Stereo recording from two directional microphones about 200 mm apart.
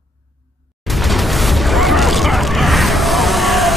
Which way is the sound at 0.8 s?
Centre (ahead or behind).